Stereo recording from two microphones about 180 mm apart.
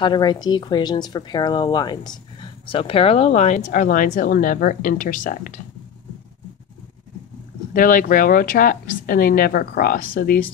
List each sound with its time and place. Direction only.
0.0 s speech: 25° left (ahead or behind); by 5.6 s 50° left (ahead or behind)
7.7 s speech: 50° left (ahead or behind)